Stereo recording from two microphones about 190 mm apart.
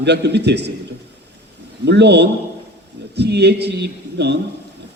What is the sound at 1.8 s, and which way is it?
A man's voice, 65° right (ahead or behind).